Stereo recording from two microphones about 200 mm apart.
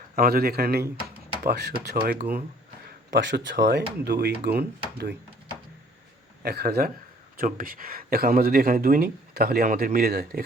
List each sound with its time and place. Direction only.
0.2 s speech: 45° right (ahead or behind)
3.1 s speech: 60° right (ahead or behind)
6.4 s speech: 50° right (ahead or behind)